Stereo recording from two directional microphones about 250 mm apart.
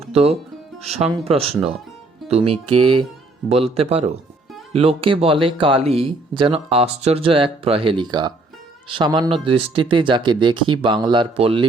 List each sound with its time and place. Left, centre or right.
0.1 s speech: right